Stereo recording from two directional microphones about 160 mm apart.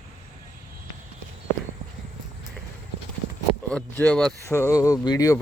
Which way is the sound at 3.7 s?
10° left (ahead or behind).